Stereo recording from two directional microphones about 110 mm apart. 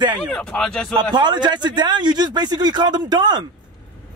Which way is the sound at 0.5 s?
5° left (ahead or behind).